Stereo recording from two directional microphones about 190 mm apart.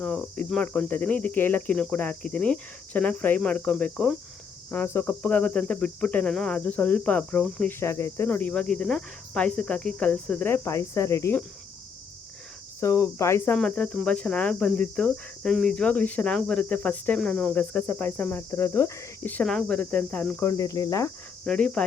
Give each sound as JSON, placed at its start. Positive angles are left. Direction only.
{"t": 0.0, "sound": "speech", "side_deg": 5}
{"t": 12.8, "sound": "speech", "side_deg": 15}
{"t": 20.5, "sound": "speech", "side_deg": 20}
{"t": 21.4, "sound": "speech", "side_deg": 5}